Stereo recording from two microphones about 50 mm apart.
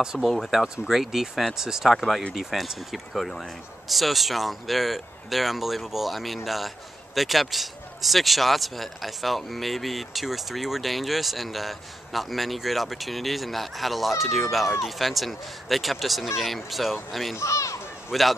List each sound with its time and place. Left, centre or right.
0.0 s speech: centre
0.3 s speech: centre
17.4 s a child's voice: left
18.1 s speech: centre